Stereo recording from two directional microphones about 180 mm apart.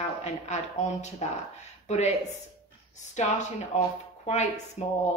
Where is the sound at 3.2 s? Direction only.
40° left (ahead or behind).